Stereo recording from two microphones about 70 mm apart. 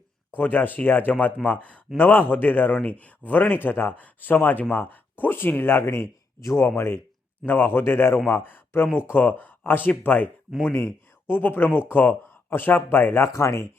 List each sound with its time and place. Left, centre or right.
0.3 s speech: left
6.6 s speech: left
10.7 s speech: left